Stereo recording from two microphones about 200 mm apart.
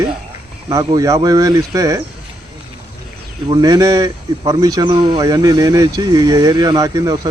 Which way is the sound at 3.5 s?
20° right (ahead or behind).